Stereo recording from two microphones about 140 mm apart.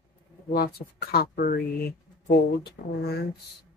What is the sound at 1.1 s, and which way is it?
Speech, 90° left.